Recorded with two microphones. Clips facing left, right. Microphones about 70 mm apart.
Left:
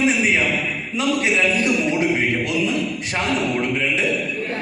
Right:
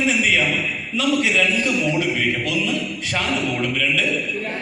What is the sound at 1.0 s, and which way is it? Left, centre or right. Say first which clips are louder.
Speech: even; left.